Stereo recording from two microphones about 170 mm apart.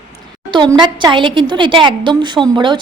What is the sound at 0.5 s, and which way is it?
A woman's voice, 25° right (ahead or behind).